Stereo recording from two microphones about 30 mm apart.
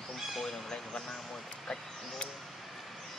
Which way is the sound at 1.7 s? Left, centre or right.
Left.